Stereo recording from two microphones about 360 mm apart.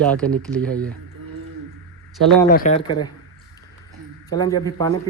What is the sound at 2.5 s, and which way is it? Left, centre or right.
Speech, left.